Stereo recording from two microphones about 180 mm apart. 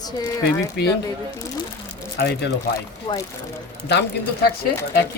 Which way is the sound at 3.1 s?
25° left (ahead or behind).